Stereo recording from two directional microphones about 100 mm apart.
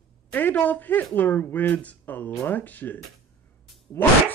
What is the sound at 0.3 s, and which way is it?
A woman's voice, 20° left (ahead or behind).